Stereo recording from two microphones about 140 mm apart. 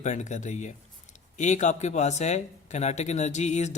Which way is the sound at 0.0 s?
55° left (ahead or behind).